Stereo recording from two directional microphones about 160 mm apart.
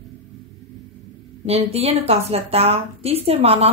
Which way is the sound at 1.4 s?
40° right (ahead or behind).